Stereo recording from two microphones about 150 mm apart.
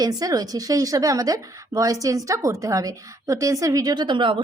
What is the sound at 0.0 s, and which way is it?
A woman's voice, 25° right (ahead or behind).